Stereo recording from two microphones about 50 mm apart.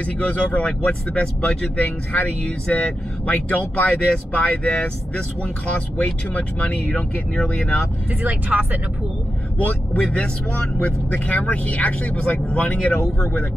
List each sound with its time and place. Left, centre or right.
0.0 s speech: left
3.3 s speech: left
8.1 s speech: right
9.6 s speech: left